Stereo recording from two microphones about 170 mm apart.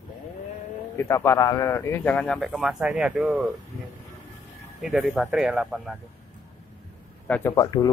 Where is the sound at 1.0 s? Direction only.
15° left (ahead or behind); by 3.5 s 5° right (ahead or behind).